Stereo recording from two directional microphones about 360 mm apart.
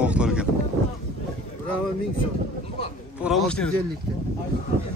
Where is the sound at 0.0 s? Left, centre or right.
Centre.